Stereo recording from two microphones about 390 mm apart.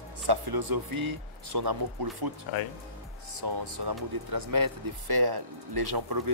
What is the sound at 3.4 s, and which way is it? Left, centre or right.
Speech, right.